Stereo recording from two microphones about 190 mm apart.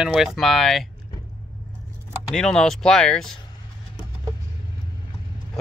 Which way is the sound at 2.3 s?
5° left (ahead or behind).